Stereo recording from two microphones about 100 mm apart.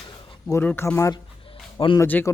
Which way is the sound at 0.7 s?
25° left (ahead or behind).